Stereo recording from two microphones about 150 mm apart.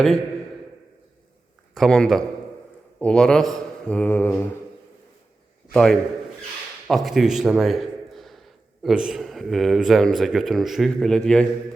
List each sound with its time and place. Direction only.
1.7 s a man's voice: centre (ahead or behind)
5.7 s a man's voice: 5° left (ahead or behind)